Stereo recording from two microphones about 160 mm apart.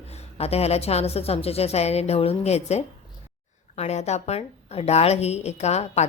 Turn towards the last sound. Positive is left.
turn(degrees=45)  # may be behind; listen again after turning